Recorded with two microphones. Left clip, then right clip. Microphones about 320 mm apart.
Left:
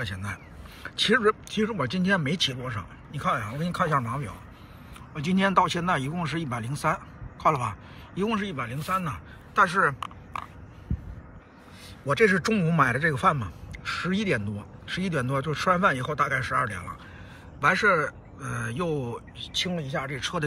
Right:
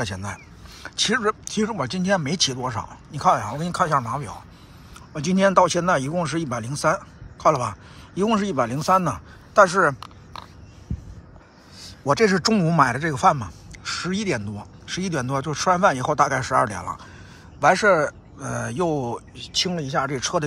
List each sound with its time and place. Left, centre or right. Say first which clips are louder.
0.0 s a man's voice: right 5 dB; centre
11.8 s a man's voice: right 3 dB; centre
19.3 s speech: right 4 dB; centre